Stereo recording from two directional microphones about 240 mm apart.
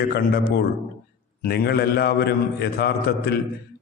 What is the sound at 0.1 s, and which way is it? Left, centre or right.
A man's voice, left.